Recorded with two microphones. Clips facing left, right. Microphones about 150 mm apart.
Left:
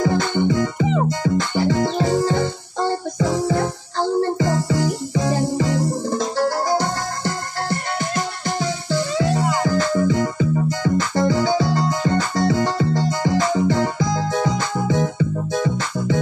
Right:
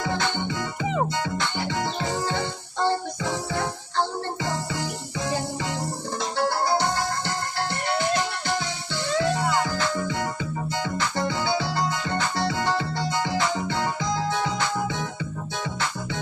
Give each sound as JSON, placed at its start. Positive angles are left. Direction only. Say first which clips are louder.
{"t": 0.0, "sound": "music", "louder": "left 8 dB", "side_deg": 40}